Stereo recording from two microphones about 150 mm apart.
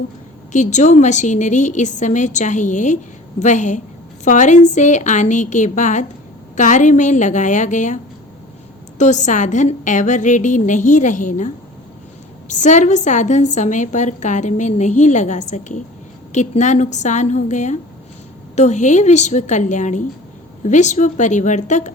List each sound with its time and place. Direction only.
0.5 s a woman's voice: 50° left (ahead or behind)
9.0 s a woman's voice: 55° left (ahead or behind)